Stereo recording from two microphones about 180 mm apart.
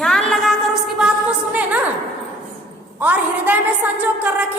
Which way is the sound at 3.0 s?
10° right (ahead or behind).